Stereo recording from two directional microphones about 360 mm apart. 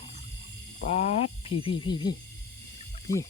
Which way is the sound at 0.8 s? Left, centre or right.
Centre.